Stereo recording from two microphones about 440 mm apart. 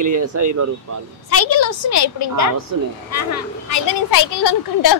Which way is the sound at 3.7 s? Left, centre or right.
Left.